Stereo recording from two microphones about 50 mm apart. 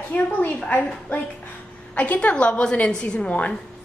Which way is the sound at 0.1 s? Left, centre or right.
Left.